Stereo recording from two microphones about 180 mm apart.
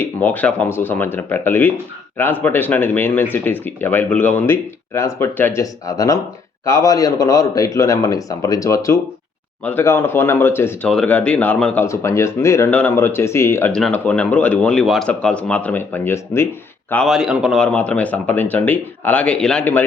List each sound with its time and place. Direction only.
0.0 s speech: 10° left (ahead or behind)
16.9 s speech: centre (ahead or behind)